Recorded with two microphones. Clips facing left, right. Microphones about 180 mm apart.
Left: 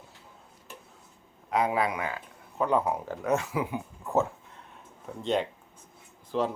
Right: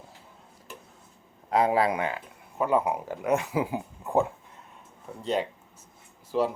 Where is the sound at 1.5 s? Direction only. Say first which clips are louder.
Right 4 dB; 35° right (ahead or behind).